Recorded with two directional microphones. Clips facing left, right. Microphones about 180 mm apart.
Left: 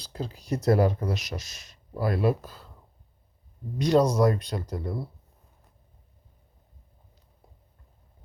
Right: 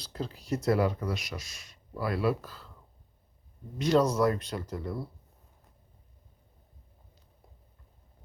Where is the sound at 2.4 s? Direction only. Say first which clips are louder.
Left 2 dB; 20° left (ahead or behind).